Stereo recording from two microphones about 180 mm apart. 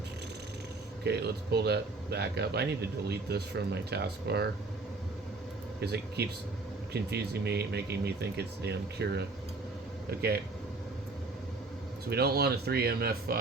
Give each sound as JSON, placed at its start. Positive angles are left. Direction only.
{"t": 1.0, "sound": "speech", "side_deg": -65}
{"t": 5.8, "sound": "speech", "side_deg": -65}
{"t": 12.0, "sound": "speech", "side_deg": -60}